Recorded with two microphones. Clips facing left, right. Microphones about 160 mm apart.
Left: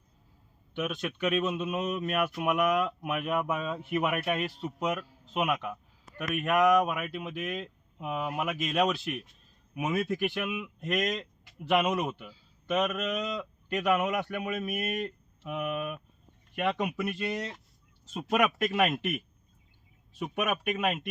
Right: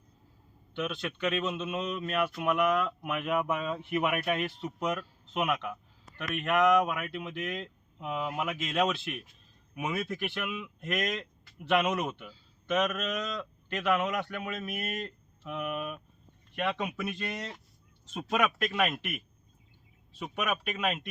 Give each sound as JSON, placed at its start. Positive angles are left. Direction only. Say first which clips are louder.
{"t": 0.8, "sound": "a man's voice", "louder": "left 1 dB", "side_deg": 15}
{"t": 3.3, "sound": "a man's voice", "louder": "right 3 dB", "side_deg": 0}
{"t": 9.7, "sound": "a man's voice", "louder": "left 4 dB", "side_deg": 15}
{"t": 17.0, "sound": "a man's voice", "louder": "left 4 dB", "side_deg": 5}
{"t": 18.9, "sound": "a man's voice", "louder": "left 5 dB", "side_deg": 20}